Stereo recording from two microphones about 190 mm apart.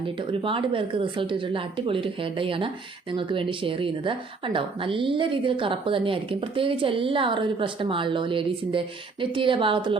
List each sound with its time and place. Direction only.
0.0 s a woman's voice: 25° right (ahead or behind)